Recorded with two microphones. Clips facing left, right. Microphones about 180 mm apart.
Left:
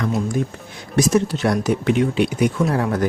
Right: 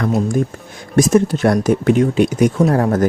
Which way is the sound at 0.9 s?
50° right (ahead or behind).